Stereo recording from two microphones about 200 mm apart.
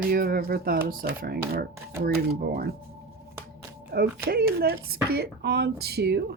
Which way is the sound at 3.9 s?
50° right (ahead or behind).